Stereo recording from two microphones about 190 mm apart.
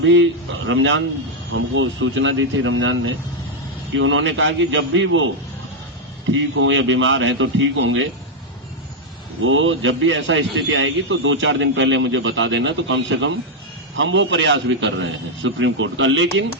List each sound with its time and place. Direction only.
0.0 s a man's voice: 75° right (ahead or behind)
0.7 s a man's voice: 85° right
6.3 s a man's voice: 75° right (ahead or behind)
9.4 s a man's voice: 90° right; by 16.5 s 75° right (ahead or behind)